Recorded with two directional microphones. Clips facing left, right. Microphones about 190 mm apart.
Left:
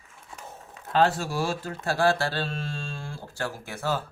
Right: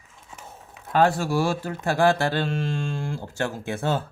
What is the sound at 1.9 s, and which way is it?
Speech, 15° right (ahead or behind).